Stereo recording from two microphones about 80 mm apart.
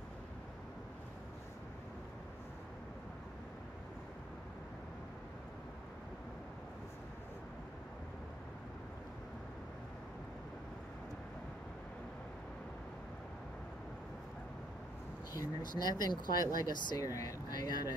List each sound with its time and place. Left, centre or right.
15.3 s speech: left